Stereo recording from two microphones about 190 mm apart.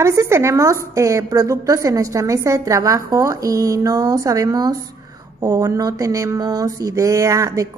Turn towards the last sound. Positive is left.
turn(degrees=-15)  # may be behind; listen again after turning